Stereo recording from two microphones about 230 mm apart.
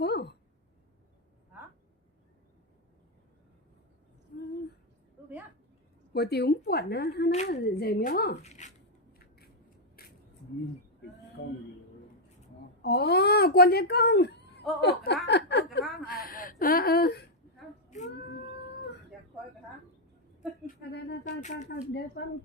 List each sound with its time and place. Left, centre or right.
0.0 s a sound: left
6.1 s a woman's voice: left
8.4 s speech: left
9.1 s scissors: left
11.4 s a sound: left
12.8 s a woman's voice: left
16.2 s speech: left
20.7 s speech: left
21.2 s speech: left